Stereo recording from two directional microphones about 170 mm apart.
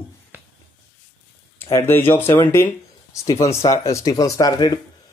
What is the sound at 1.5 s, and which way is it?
Speech, 15° left (ahead or behind).